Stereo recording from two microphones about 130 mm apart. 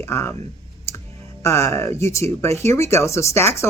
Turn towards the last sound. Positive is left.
turn(degrees=20)  # may be behind; listen again after turning